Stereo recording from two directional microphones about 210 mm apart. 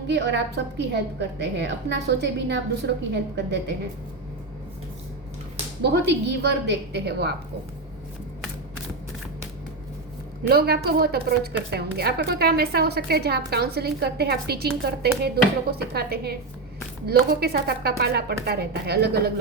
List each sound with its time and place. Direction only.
0.1 s a woman's voice: 55° right (ahead or behind)
5.8 s a woman's voice: 55° right (ahead or behind)
10.4 s a woman's voice: 50° right (ahead or behind)